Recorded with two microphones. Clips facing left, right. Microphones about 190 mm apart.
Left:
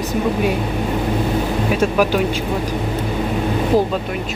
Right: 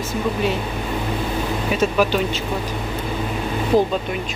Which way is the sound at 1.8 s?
10° left (ahead or behind).